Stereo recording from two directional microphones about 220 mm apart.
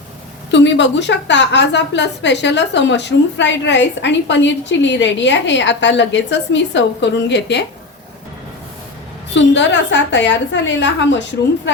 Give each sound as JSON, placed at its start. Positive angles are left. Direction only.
{"t": 0.5, "sound": "a woman's voice", "side_deg": 55}
{"t": 9.3, "sound": "a woman's voice", "side_deg": 55}